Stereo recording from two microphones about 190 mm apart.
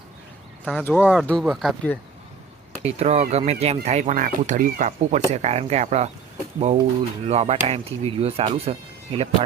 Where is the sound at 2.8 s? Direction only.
35° right (ahead or behind).